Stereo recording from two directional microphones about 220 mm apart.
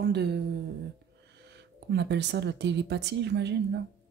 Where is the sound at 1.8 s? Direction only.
50° right (ahead or behind).